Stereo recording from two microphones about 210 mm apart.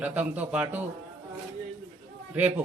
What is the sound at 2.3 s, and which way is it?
Speech, 10° right (ahead or behind).